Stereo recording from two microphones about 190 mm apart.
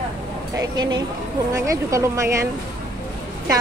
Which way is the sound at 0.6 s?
20° right (ahead or behind).